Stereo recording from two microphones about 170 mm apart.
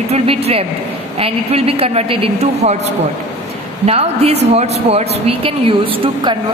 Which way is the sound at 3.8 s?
40° right (ahead or behind).